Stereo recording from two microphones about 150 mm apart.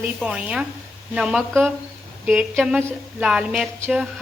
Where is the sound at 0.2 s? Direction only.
5° right (ahead or behind).